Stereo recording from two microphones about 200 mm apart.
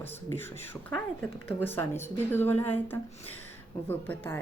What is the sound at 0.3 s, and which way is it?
Speech, 10° left (ahead or behind).